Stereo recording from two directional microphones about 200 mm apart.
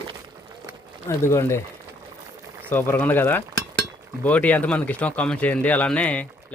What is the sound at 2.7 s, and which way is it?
Speech, 10° left (ahead or behind).